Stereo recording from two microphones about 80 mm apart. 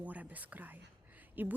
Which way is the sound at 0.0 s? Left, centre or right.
Centre.